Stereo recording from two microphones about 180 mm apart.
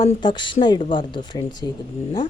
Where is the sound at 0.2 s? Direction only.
25° left (ahead or behind).